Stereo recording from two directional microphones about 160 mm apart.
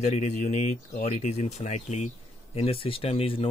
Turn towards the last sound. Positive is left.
turn(degrees=35)  # may be behind; listen again after turning